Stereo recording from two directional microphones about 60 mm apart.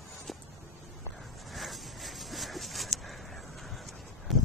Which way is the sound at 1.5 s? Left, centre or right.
Centre.